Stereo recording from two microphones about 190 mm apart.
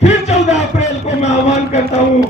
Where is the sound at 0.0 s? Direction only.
35° left (ahead or behind).